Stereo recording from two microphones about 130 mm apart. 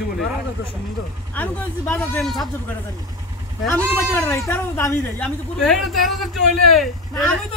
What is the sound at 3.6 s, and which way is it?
Speech, 15° left (ahead or behind).